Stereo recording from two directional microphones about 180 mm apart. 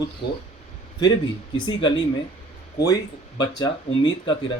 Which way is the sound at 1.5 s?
25° left (ahead or behind).